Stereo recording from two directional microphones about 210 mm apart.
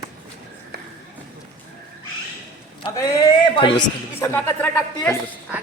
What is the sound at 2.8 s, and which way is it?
A man's voice, 20° left (ahead or behind).